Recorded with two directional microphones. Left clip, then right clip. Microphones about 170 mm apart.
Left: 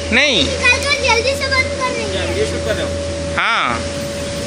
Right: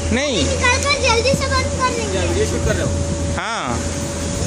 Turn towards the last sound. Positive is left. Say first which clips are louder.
# left 7 dB
turn(degrees=-20)  # may be behind; listen again after turning